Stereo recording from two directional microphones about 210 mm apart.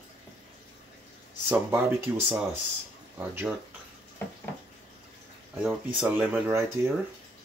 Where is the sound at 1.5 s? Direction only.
10° right (ahead or behind).